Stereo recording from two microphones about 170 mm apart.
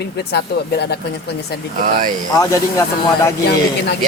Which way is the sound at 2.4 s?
20° left (ahead or behind).